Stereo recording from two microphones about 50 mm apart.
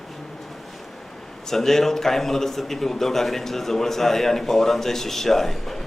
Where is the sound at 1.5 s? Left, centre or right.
Centre.